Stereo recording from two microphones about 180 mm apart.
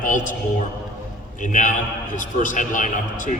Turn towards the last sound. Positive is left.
turn(degrees=45)  # may be behind; listen again after turning